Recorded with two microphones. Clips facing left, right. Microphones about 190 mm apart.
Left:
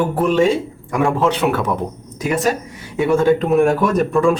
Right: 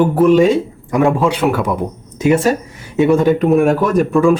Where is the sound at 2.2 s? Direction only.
25° right (ahead or behind).